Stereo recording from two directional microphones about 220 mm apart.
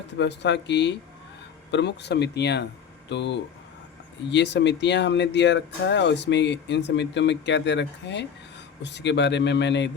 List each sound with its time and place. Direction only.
0.2 s speech: 50° left (ahead or behind)